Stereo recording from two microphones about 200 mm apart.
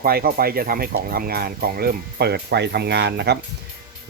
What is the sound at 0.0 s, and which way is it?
Speech, 50° right (ahead or behind).